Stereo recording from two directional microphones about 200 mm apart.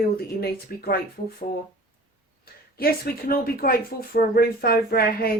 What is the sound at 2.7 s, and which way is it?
Speech, 50° left (ahead or behind).